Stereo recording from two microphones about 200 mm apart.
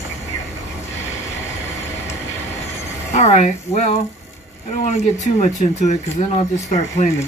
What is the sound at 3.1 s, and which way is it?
Speech, 35° left (ahead or behind).